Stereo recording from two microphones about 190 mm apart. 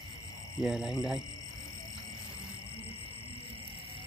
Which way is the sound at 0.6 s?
5° right (ahead or behind).